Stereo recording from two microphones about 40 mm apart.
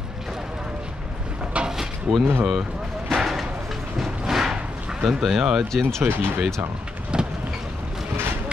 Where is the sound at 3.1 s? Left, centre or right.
Centre.